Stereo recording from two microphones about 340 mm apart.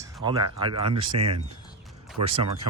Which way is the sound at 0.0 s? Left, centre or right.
Centre.